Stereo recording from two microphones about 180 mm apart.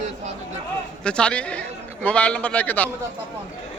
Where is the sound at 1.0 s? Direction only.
5° left (ahead or behind).